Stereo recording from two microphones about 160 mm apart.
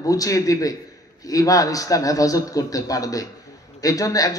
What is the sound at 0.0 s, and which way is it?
A man's voice, 20° left (ahead or behind).